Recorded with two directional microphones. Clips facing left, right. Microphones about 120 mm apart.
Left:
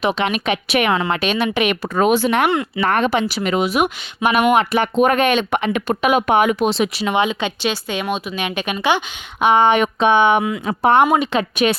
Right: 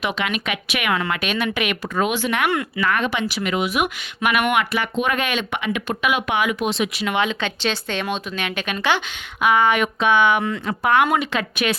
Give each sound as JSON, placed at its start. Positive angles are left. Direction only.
{"t": 0.0, "sound": "speech", "side_deg": 30}
{"t": 2.5, "sound": "speech", "side_deg": 25}
{"t": 2.9, "sound": "speech", "side_deg": 35}
{"t": 4.8, "sound": "speech", "side_deg": 45}
{"t": 7.2, "sound": "speech", "side_deg": 15}
{"t": 9.4, "sound": "speech", "side_deg": 25}